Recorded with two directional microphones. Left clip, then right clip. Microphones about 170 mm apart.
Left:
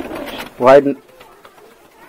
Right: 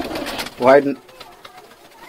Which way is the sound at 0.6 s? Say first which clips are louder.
Left 4 dB; 20° left (ahead or behind).